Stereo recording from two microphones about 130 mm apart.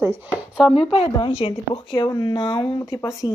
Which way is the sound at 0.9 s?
45° left (ahead or behind).